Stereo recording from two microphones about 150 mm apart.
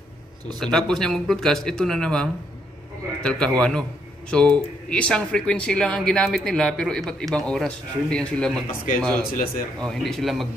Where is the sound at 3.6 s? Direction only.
5° left (ahead or behind).